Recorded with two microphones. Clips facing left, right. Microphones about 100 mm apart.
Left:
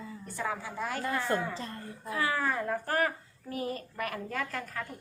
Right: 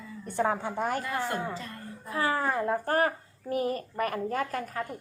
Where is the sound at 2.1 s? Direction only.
35° right (ahead or behind).